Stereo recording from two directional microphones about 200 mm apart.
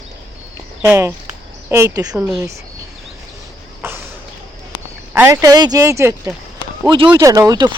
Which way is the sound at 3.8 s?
10° right (ahead or behind).